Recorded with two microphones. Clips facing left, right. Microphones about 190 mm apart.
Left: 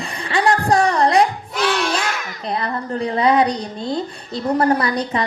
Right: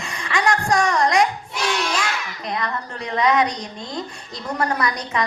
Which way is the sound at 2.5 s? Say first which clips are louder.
Left 5 dB; 30° left (ahead or behind).